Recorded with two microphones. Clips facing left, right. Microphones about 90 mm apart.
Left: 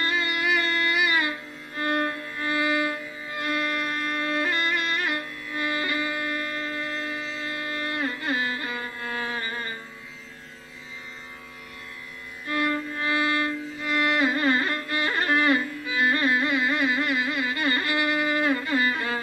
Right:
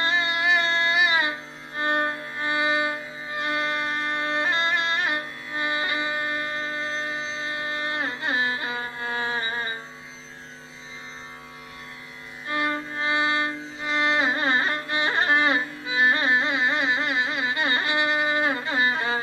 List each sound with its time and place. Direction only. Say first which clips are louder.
0.0 s music: right 2 dB; 25° right (ahead or behind)
12.4 s music: left 1 dB; 25° right (ahead or behind)